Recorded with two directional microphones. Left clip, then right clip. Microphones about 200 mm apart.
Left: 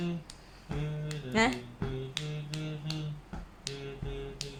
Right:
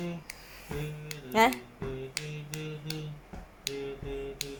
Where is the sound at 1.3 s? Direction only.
10° right (ahead or behind).